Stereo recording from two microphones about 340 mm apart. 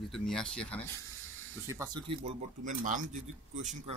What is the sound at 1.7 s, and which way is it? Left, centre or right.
Speech, centre.